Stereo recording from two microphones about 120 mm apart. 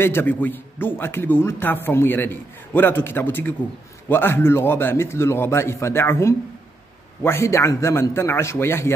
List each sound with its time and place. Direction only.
0.0 s a man's voice: 15° left (ahead or behind)